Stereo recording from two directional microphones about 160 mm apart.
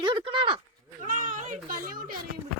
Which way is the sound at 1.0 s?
55° right (ahead or behind).